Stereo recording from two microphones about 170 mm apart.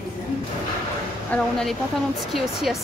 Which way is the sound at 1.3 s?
Centre (ahead or behind).